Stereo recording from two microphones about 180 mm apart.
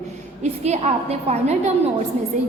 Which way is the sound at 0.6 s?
35° right (ahead or behind).